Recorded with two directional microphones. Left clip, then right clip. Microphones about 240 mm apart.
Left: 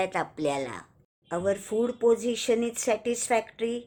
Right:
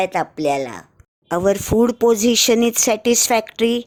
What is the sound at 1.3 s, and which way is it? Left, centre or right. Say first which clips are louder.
Speech: right 10 dB; right.